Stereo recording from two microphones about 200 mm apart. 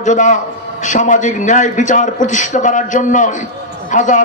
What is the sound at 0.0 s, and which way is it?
A man's voice, 40° left (ahead or behind).